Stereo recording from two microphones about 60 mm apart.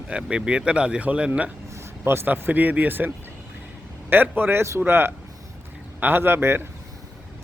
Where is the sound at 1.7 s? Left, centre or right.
Right.